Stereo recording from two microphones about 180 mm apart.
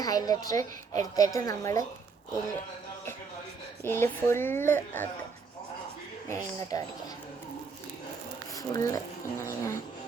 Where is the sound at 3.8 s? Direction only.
15° left (ahead or behind).